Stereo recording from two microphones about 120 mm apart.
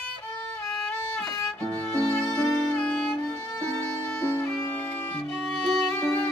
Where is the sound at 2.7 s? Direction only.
5° left (ahead or behind).